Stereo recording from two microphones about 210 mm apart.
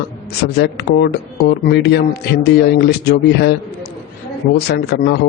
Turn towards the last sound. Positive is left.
turn(degrees=50)  # may be behind; listen again after turning